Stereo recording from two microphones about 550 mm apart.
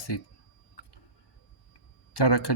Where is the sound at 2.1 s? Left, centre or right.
Left.